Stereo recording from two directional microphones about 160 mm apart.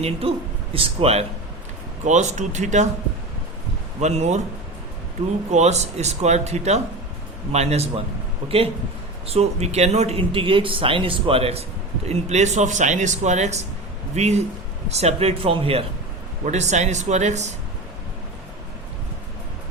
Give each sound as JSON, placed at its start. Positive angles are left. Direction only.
{"t": 0.0, "sound": "speech", "side_deg": -35}
{"t": 2.0, "sound": "speech", "side_deg": -50}
{"t": 4.0, "sound": "speech", "side_deg": -45}
{"t": 5.5, "sound": "speech", "side_deg": -45}